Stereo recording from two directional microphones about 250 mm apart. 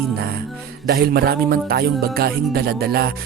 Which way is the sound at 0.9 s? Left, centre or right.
Right.